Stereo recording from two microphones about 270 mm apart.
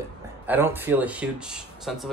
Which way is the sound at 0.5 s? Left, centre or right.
Centre.